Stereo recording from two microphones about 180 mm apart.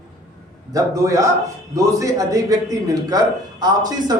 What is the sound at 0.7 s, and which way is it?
A man's voice, 20° right (ahead or behind).